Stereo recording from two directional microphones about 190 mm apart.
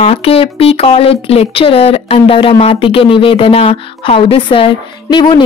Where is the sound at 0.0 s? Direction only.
30° left (ahead or behind).